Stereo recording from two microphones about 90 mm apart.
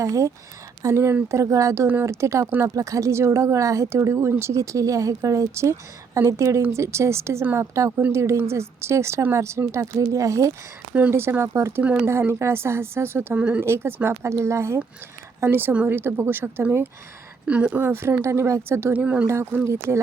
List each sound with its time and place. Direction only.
0.0 s speech: 35° right (ahead or behind)
11.8 s speech: 15° right (ahead or behind)
12.0 s speech: 30° right (ahead or behind)
17.4 s speech: 15° right (ahead or behind); by 18.9 s 30° right (ahead or behind)
18.9 s speech: 15° right (ahead or behind)
19.3 s speech: 30° right (ahead or behind)